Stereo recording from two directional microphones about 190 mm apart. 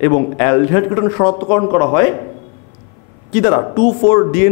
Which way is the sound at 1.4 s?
15° left (ahead or behind).